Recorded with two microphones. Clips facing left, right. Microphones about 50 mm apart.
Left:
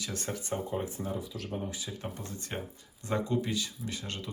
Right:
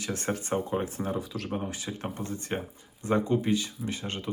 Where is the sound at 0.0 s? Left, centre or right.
Right.